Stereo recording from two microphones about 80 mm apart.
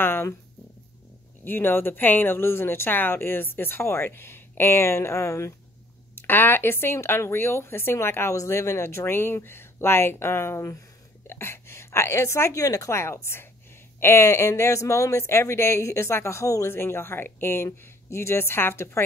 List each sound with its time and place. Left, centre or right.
0.0 s dog: left
1.4 s speech: left